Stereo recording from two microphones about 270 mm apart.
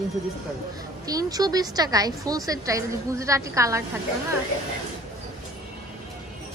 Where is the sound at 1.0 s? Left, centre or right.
Centre.